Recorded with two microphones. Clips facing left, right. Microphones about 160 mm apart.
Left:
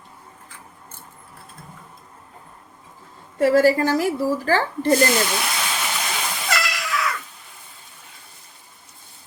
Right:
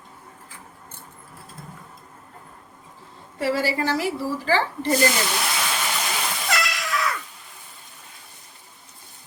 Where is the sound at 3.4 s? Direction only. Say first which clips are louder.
Left 8 dB; 45° left (ahead or behind).